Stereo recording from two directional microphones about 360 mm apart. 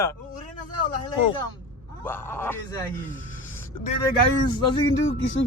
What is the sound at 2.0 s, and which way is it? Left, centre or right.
Speech, centre.